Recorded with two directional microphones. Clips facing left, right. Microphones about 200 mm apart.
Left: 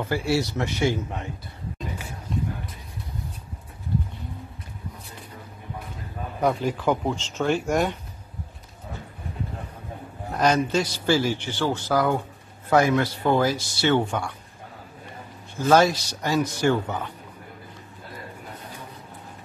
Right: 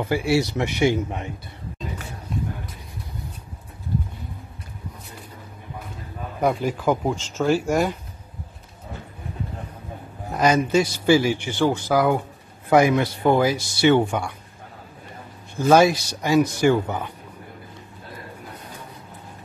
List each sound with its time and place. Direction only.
0.0 s speech: 15° right (ahead or behind)
6.4 s speech: 10° right (ahead or behind)
10.3 s a man's voice: 10° right (ahead or behind)
15.7 s speech: 10° right (ahead or behind)